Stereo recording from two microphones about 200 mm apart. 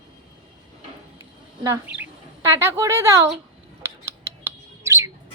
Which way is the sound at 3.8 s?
15° right (ahead or behind).